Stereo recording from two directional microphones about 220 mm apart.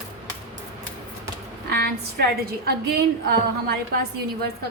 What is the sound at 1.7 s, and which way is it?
A woman's voice, 45° right (ahead or behind).